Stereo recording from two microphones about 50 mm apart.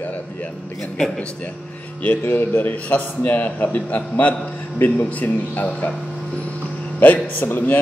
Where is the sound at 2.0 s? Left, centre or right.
Left.